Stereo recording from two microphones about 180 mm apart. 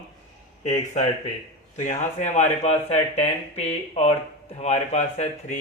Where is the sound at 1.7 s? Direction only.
40° left (ahead or behind).